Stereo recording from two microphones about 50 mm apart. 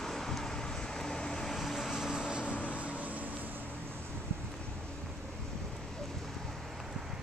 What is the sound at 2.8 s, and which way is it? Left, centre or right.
Vehicle, right.